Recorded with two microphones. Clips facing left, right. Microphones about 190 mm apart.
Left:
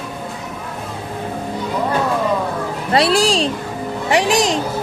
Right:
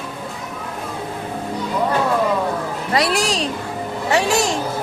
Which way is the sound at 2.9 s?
30° left (ahead or behind).